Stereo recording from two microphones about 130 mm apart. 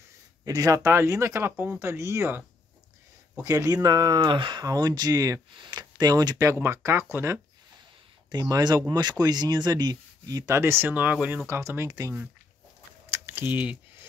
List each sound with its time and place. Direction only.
0.5 s speech: 25° right (ahead or behind)
3.4 s speech: 30° right (ahead or behind)
8.3 s speech: 30° right (ahead or behind)
13.2 s speech: 15° right (ahead or behind)